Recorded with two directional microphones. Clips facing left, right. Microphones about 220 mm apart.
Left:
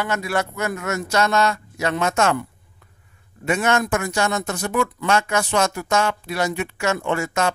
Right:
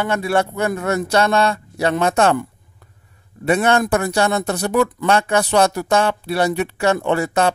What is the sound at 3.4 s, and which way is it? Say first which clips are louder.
Speech: right 4 dB; 35° right (ahead or behind).